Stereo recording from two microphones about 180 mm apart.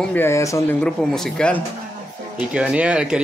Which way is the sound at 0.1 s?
15° left (ahead or behind).